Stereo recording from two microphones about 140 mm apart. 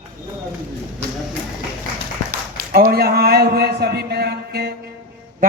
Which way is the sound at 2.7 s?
90° right.